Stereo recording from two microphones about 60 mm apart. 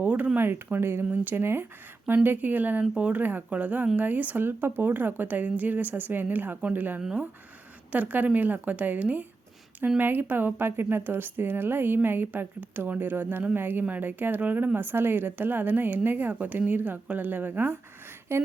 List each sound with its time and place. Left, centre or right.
0.0 s a sound: right
0.3 s a woman's voice: right
1.1 s a woman's voice: right
18.3 s speech: right